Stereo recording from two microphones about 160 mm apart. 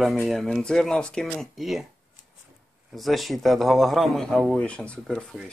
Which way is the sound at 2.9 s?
Centre (ahead or behind).